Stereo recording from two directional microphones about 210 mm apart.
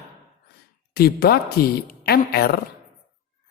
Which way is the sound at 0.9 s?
50° left (ahead or behind).